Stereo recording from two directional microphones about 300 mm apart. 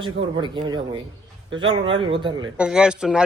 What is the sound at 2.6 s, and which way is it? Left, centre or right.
Speech, centre.